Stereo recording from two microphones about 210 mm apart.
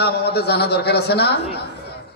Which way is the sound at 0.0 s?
50° left (ahead or behind).